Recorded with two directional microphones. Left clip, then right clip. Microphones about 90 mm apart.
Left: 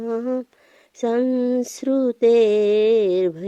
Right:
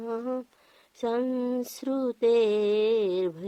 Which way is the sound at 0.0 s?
20° left (ahead or behind).